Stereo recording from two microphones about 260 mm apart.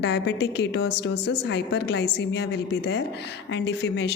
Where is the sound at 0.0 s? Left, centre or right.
Left.